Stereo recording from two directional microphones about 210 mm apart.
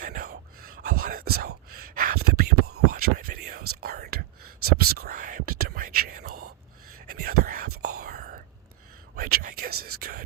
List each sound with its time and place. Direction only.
0.0 s whispering: 45° right (ahead or behind)
2.9 s a sound: 45° right (ahead or behind)
3.8 s whispering: 45° right (ahead or behind)
7.1 s a sound: 45° right (ahead or behind)
7.8 s whispering: 90° right
8.0 s whispering: 45° right (ahead or behind)